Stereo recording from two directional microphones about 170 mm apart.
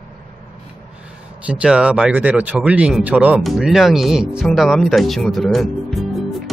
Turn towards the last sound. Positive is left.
turn(degrees=0)  # may be behind; listen again after turning